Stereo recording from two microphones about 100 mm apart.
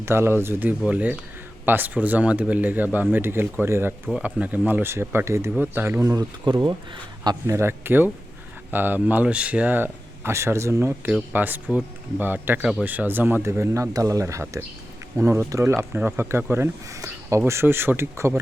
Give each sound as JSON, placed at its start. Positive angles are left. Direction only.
{"t": 0.0, "sound": "speech", "side_deg": -25}
{"t": 6.4, "sound": "speech", "side_deg": -50}
{"t": 7.4, "sound": "speech", "side_deg": -25}